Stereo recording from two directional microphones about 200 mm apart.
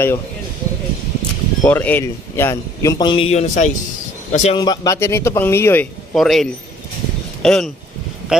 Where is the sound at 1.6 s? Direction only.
10° left (ahead or behind); by 4.6 s 35° left (ahead or behind).